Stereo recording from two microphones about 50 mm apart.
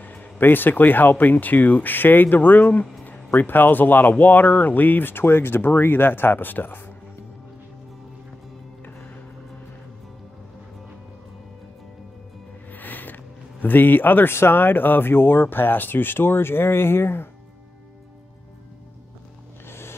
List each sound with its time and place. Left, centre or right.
0.0 s speech: left
12.7 s a sound: left
14.3 s speech: left